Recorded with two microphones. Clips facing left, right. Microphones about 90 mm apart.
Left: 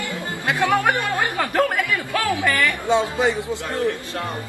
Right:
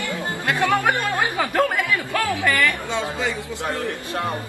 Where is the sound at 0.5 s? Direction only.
10° left (ahead or behind).